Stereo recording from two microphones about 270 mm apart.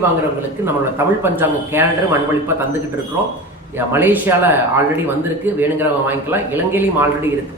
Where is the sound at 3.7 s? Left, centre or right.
Centre.